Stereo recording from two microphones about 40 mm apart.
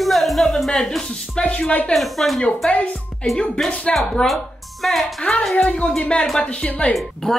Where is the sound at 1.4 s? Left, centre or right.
Left.